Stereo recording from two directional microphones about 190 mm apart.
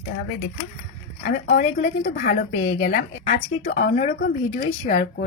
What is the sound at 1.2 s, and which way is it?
A woman's voice, 50° left (ahead or behind).